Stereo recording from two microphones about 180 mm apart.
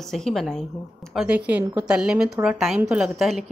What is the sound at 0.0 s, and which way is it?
Speech, centre (ahead or behind).